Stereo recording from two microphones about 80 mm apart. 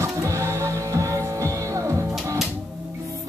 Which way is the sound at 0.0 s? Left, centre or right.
Right.